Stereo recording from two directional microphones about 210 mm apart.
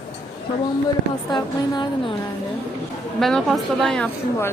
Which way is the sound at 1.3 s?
20° left (ahead or behind).